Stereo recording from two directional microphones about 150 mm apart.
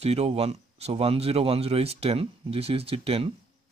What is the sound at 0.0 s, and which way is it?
Speech, 45° right (ahead or behind).